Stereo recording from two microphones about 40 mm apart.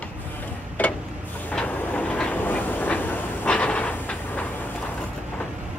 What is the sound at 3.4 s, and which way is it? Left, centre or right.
Train, left.